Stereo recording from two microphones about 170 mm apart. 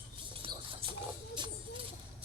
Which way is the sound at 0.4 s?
35° right (ahead or behind).